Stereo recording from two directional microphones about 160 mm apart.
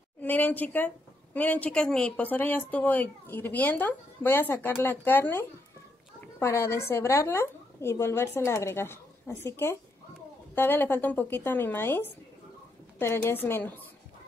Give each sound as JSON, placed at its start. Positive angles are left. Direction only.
{"t": 0.2, "sound": "a woman's voice", "side_deg": 10}